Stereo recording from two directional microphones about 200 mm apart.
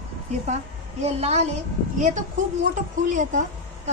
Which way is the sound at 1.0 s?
30° right (ahead or behind).